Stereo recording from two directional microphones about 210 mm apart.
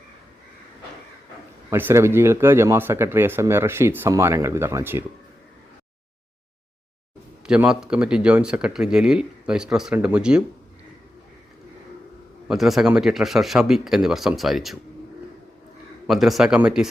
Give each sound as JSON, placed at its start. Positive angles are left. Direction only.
{"t": 1.7, "sound": "speech", "side_deg": -10}
{"t": 7.4, "sound": "speech", "side_deg": -5}
{"t": 12.5, "sound": "speech", "side_deg": 0}
{"t": 16.0, "sound": "speech", "side_deg": 0}